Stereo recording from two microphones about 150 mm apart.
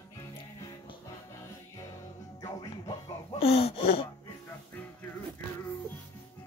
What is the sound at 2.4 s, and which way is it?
Music, 25° left (ahead or behind).